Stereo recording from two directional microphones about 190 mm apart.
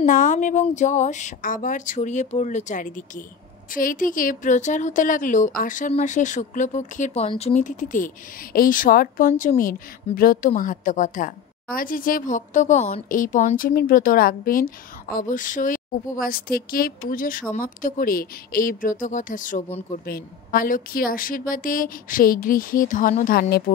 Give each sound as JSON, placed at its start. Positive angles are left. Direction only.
{"t": 0.0, "sound": "a woman's voice", "side_deg": 40}